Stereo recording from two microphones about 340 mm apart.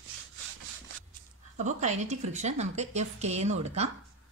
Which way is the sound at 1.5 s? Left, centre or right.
Right.